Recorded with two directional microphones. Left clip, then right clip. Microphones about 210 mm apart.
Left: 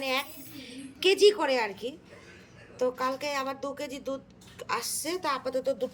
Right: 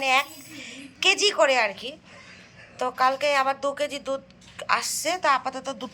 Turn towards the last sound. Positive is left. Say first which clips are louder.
# left 1 dB
turn(degrees=10)  # may be behind; listen again after turning